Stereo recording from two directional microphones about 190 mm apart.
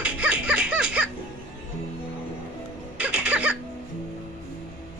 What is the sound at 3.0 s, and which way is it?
Cough, 5° right (ahead or behind).